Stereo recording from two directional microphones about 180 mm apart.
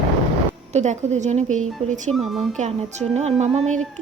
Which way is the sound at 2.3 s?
Centre (ahead or behind).